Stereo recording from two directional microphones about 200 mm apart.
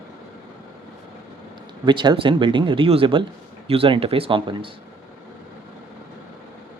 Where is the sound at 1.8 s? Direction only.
25° right (ahead or behind).